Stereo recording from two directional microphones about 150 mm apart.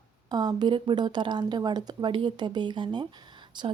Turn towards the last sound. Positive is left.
turn(degrees=-30)  # may be behind; listen again after turning